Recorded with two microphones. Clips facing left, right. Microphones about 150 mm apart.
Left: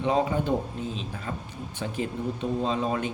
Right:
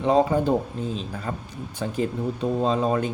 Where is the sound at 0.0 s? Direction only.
35° right (ahead or behind).